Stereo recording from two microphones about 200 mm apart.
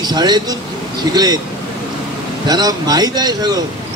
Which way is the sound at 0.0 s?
20° right (ahead or behind).